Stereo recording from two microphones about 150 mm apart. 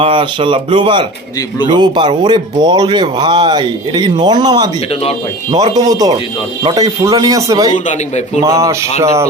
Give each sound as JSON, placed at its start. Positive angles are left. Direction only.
{"t": 0.0, "sound": "speech", "side_deg": -35}
{"t": 5.7, "sound": "speech", "side_deg": -25}